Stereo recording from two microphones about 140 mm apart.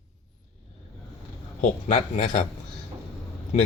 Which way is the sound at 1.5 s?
65° left (ahead or behind).